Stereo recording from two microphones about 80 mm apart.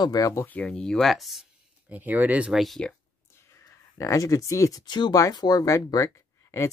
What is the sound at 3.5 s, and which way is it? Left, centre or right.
Speech, left.